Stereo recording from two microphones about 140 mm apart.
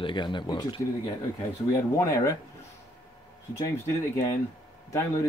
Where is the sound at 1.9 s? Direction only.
25° left (ahead or behind).